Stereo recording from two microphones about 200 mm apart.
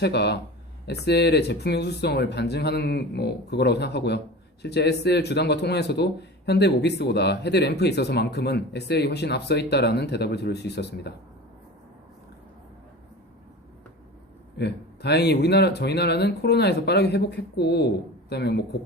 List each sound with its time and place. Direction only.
0.0 s speech: 55° left (ahead or behind)
14.5 s speech: 55° left (ahead or behind)